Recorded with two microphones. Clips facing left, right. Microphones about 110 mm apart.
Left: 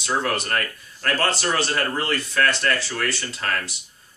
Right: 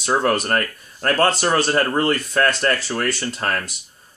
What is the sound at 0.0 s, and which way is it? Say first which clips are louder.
Speech: right 5 dB; 40° right (ahead or behind).